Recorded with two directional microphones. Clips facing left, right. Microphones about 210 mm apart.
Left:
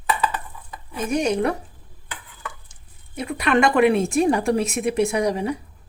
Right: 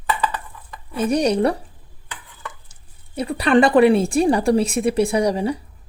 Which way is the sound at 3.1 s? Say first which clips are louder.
Right 4 dB; 35° right (ahead or behind).